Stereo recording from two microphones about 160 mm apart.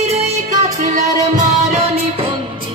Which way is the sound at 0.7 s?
55° right (ahead or behind).